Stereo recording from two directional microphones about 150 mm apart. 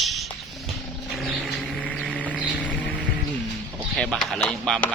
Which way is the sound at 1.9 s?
10° left (ahead or behind).